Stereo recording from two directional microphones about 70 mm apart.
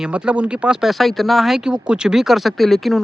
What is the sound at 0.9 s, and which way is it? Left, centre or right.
Speech, centre.